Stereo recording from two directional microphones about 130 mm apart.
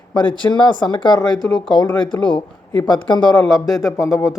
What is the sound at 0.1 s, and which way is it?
Speech, 35° left (ahead or behind).